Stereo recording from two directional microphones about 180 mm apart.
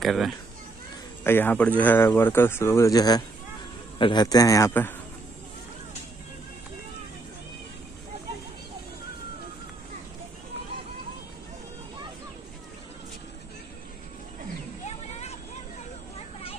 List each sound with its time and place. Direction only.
0.0 s speech: centre (ahead or behind)
1.2 s a man's voice: 10° left (ahead or behind)
14.9 s a sound: 40° left (ahead or behind)